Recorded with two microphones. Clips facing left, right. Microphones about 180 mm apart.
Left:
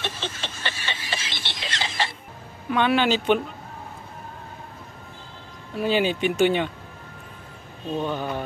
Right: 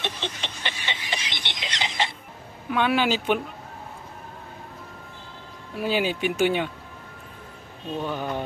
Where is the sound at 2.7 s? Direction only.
5° right (ahead or behind).